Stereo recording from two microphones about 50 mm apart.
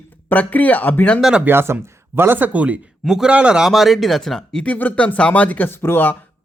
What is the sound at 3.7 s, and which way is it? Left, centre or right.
Speech, centre.